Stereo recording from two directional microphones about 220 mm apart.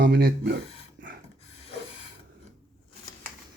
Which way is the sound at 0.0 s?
45° right (ahead or behind).